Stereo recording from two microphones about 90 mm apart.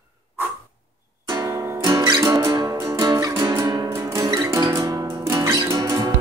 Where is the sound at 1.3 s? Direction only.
40° right (ahead or behind).